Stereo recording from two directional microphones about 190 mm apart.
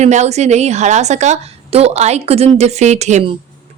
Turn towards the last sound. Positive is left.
turn(degrees=-35)  # may be behind; listen again after turning